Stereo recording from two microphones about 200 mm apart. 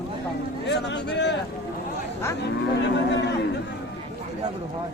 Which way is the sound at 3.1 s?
60° left (ahead or behind).